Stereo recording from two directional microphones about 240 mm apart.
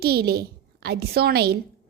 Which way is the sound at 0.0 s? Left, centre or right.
Right.